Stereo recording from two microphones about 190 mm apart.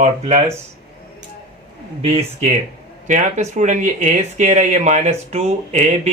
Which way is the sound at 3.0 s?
40° right (ahead or behind).